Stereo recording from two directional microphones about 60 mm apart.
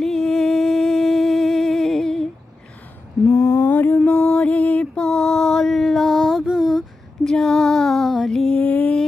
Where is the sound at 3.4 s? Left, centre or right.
Left.